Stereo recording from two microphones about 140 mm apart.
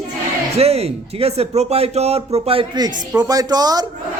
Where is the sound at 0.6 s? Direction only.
50° right (ahead or behind).